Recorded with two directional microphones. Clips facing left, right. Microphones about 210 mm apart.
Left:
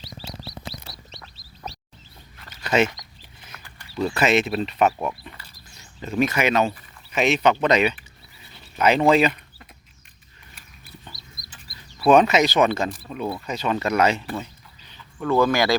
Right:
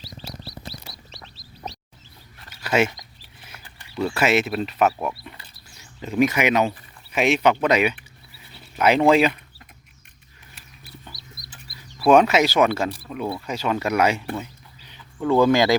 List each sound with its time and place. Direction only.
2.6 s speech: 10° right (ahead or behind)
4.0 s speech: 5° right (ahead or behind)
6.0 s speech: 15° right (ahead or behind)
12.0 s speech: 5° right (ahead or behind)